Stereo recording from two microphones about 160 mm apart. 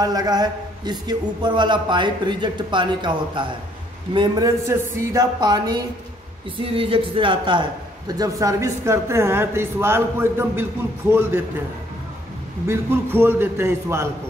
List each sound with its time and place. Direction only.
0.0 s a man's voice: 25° right (ahead or behind)
6.6 s speech: 35° right (ahead or behind)
8.2 s speech: 20° right (ahead or behind)
12.6 s speech: 15° right (ahead or behind)